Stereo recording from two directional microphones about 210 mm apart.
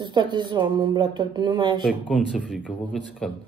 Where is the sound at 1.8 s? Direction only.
Centre (ahead or behind).